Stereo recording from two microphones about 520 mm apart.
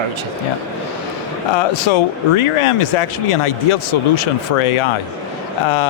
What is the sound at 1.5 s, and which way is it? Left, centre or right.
Speech, left.